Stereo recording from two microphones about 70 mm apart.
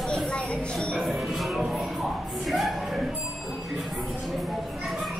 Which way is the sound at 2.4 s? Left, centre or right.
Centre.